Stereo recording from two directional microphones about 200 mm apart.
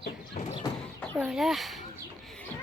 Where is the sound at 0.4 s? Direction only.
35° left (ahead or behind).